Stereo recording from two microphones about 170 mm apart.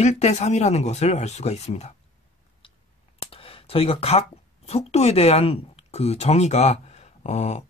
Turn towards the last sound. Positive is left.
turn(degrees=40)  # may be behind; listen again after turning